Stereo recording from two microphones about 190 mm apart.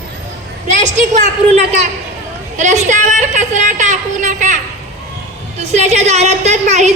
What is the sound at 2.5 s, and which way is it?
A woman's voice, 40° right (ahead or behind).